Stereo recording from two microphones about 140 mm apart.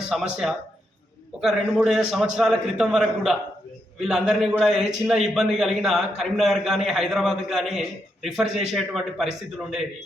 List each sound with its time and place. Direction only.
0.1 s a man's voice: centre (ahead or behind)